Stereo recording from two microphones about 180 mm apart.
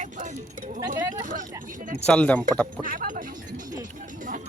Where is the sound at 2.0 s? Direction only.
5° left (ahead or behind).